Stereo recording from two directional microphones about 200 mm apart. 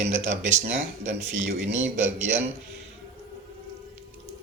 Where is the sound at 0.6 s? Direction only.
35° right (ahead or behind).